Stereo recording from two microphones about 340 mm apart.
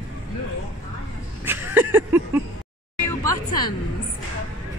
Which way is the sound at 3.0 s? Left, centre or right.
Centre.